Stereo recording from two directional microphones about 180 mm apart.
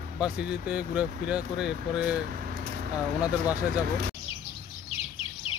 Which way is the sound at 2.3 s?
50° right (ahead or behind).